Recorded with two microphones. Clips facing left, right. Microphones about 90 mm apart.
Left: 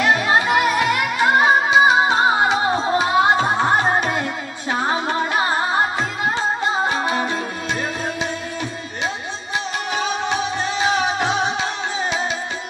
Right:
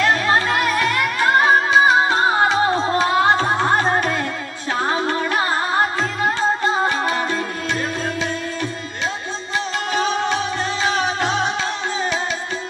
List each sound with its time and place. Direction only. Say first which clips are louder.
0.0 s music: even; 20° left (ahead or behind)
6.9 s music: even; 20° left (ahead or behind)
10.2 s music: right 1 dB; 20° left (ahead or behind)